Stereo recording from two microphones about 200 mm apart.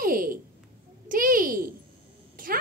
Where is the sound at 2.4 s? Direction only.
45° right (ahead or behind).